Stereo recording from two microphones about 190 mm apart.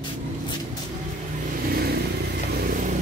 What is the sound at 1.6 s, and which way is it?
Vehicle, 55° right (ahead or behind).